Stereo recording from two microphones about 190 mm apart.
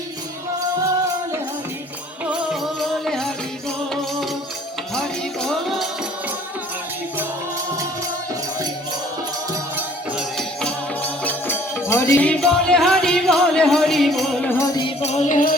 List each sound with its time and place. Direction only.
2.2 s music: 5° right (ahead or behind)
4.9 s music: centre (ahead or behind)
10.2 s music: 5° left (ahead or behind)
14.8 s music: 30° left (ahead or behind)